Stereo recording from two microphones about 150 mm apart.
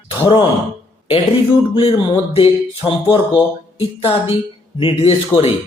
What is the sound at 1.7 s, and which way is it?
Speech, 35° left (ahead or behind).